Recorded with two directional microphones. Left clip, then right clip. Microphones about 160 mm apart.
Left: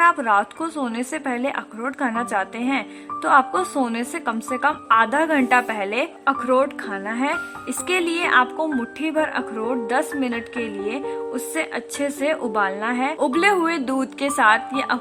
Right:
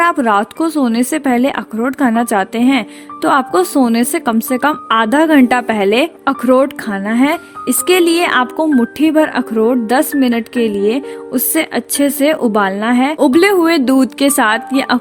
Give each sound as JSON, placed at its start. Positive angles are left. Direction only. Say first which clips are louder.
{"t": 0.0, "sound": "speech", "louder": "right 5 dB", "side_deg": -40}